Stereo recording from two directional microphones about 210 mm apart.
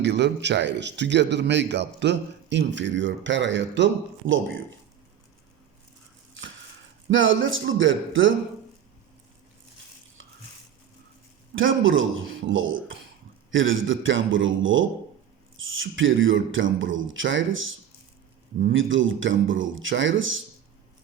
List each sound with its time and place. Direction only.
0.0 s a man's voice: 55° right (ahead or behind)
7.1 s a man's voice: 65° right (ahead or behind)
11.5 s a man's voice: 65° right (ahead or behind)